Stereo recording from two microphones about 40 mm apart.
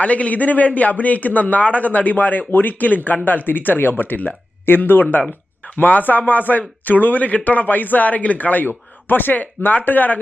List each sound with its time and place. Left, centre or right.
0.0 s a man's voice: left
4.6 s speech: left